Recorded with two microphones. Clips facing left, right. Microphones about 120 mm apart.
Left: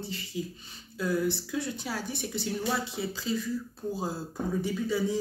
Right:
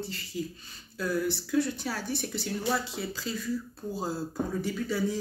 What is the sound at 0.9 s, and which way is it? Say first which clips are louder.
Speech: left 1 dB; 20° left (ahead or behind).